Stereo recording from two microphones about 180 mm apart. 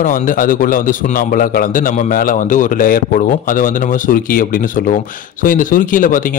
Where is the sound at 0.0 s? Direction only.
50° left (ahead or behind).